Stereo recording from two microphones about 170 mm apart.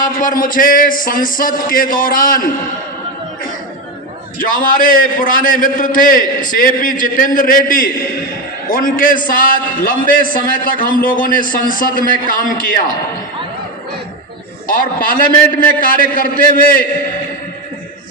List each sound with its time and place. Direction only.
0.0 s a man's voice: 50° left (ahead or behind)
4.4 s a man's voice: 55° left (ahead or behind)
14.7 s a man's voice: 55° left (ahead or behind)